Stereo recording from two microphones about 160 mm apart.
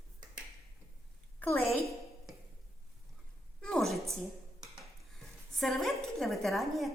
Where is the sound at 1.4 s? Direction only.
15° left (ahead or behind).